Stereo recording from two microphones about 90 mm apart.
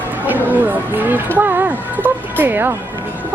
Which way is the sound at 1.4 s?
20° right (ahead or behind).